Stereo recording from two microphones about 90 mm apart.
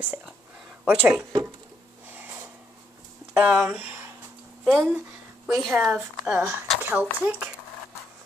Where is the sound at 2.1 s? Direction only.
25° right (ahead or behind).